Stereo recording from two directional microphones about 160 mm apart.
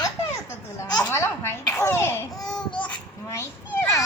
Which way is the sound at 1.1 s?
15° left (ahead or behind).